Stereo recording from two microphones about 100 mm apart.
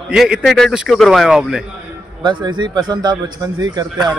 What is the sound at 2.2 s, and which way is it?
A man's voice, 50° right (ahead or behind).